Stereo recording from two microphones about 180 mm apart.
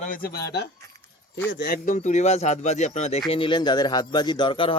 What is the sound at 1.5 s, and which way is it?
Speech, 75° left (ahead or behind).